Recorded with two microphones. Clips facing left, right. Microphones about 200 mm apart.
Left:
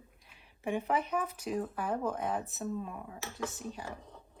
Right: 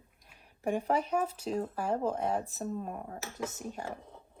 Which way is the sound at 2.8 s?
45° right (ahead or behind).